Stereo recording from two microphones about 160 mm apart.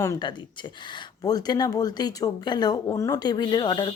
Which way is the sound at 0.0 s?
20° left (ahead or behind).